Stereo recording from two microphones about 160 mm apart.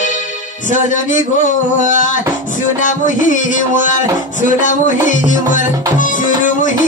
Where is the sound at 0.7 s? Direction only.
50° left (ahead or behind).